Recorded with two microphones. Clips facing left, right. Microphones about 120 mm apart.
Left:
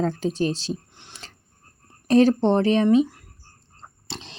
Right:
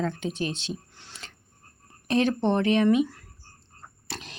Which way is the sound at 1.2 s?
35° left (ahead or behind).